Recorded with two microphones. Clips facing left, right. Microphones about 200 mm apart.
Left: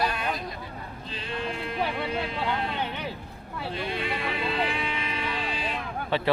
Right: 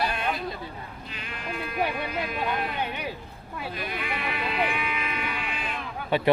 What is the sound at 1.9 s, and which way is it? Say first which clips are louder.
Speech: left 1 dB; 25° left (ahead or behind).